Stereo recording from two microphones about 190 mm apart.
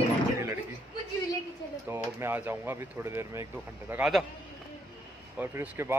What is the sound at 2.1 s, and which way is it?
Speech, 10° right (ahead or behind).